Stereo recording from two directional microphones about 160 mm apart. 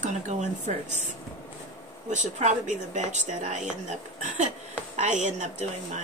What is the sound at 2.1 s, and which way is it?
Speech, 45° right (ahead or behind).